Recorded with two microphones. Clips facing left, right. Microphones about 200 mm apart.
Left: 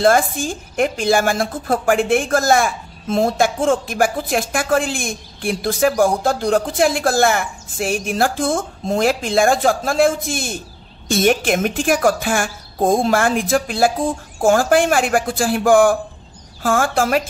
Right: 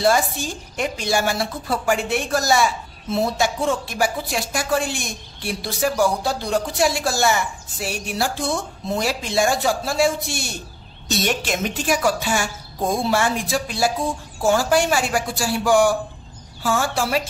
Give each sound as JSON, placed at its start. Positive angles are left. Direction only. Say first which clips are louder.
{"t": 0.0, "sound": "a woman's voice", "louder": "left 4 dB", "side_deg": 50}